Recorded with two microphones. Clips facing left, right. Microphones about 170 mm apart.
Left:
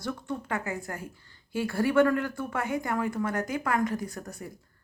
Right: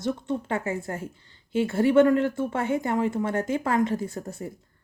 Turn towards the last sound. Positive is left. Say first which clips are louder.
# right 5 dB
turn(degrees=-25)  # may be behind; listen again after turning